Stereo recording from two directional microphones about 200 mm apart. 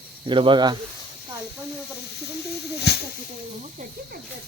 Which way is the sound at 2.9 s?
55° left (ahead or behind).